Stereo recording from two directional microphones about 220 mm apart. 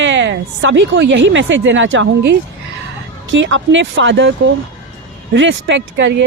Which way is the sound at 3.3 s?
60° right (ahead or behind).